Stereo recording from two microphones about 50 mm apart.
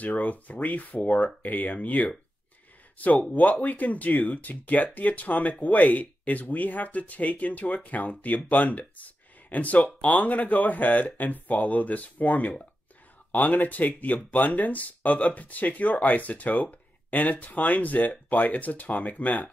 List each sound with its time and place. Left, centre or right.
0.0 s speech: left